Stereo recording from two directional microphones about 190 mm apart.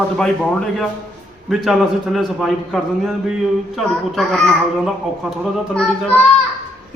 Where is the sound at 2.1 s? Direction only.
Centre (ahead or behind).